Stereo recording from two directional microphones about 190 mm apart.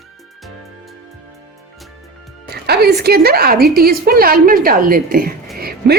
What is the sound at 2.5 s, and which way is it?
A woman's voice, 55° right (ahead or behind).